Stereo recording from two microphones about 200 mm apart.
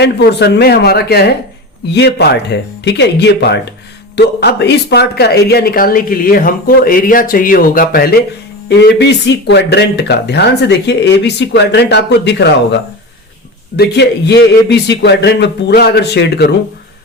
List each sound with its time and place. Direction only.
0.0 s speech: 55° left (ahead or behind)
8.7 s speech: 60° left (ahead or behind)
13.7 s speech: 55° left (ahead or behind)